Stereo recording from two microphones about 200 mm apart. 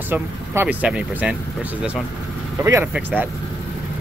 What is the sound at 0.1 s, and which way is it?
Speech, 10° right (ahead or behind).